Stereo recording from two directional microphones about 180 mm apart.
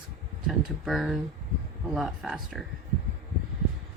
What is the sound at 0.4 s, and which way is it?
Speech, centre (ahead or behind).